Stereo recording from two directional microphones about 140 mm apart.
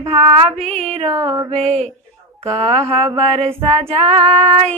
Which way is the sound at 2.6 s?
45° right (ahead or behind).